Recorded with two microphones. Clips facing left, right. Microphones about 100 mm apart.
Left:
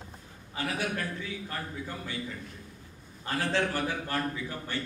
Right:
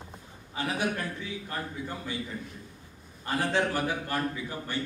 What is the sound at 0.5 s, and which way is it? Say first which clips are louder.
A man's voice: right 2 dB; 20° right (ahead or behind).